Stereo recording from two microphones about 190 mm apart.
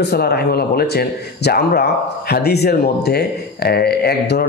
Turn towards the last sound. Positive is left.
turn(degrees=55)  # may be behind; listen again after turning